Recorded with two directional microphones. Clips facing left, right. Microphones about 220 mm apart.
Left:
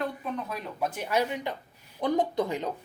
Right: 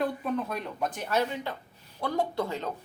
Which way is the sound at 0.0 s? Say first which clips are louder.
Right 3 dB; centre (ahead or behind).